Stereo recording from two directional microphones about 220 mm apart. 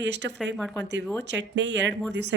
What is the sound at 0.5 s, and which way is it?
Speech, 5° left (ahead or behind).